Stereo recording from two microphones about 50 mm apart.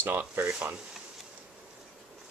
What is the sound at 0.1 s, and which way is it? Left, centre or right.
Speech, right.